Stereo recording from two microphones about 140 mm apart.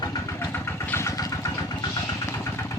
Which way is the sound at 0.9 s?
20° left (ahead or behind).